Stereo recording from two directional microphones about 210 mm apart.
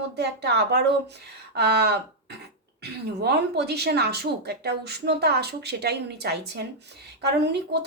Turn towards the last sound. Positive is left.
turn(degrees=-55)  # may be behind; listen again after turning